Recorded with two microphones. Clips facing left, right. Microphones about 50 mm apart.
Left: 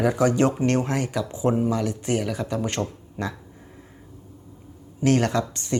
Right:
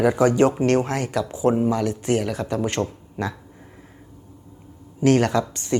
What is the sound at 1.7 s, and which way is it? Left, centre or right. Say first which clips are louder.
A man's voice: right 3 dB; centre.